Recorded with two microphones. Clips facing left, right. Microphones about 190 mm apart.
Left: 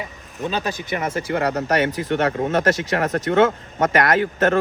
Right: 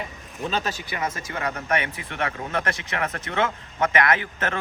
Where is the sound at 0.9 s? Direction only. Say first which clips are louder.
Left 7 dB; 30° left (ahead or behind).